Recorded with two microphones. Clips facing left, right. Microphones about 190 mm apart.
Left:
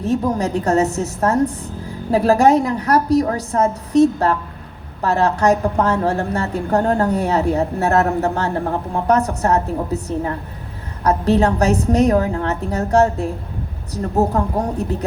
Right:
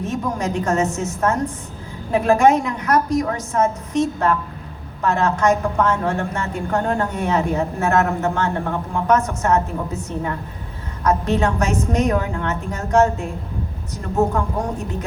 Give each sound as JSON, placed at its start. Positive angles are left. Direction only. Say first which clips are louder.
{"t": 0.0, "sound": "a woman's voice", "louder": "left 5 dB", "side_deg": 35}